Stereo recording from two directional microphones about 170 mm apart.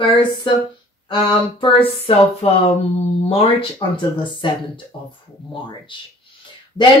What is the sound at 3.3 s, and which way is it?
Speech, 35° left (ahead or behind).